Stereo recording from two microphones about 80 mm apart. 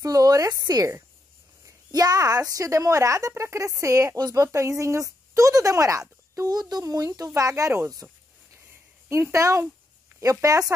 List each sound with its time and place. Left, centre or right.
0.0 s speech: right
6.8 s speech: right
9.3 s speech: right